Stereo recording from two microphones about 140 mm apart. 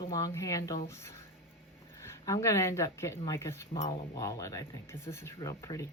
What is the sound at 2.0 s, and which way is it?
A woman's voice, 20° left (ahead or behind).